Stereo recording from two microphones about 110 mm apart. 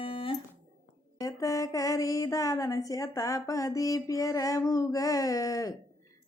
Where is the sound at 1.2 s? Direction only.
30° left (ahead or behind).